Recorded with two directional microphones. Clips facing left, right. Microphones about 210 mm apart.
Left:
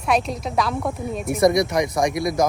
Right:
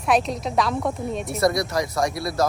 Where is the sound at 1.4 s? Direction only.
20° left (ahead or behind).